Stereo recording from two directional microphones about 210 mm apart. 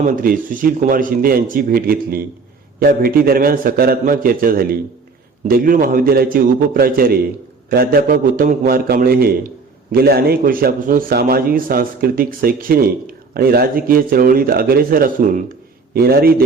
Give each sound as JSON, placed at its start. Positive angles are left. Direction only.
{"t": 0.0, "sound": "a man's voice", "side_deg": -40}